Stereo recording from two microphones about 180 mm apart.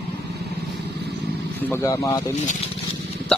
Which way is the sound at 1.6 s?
15° left (ahead or behind).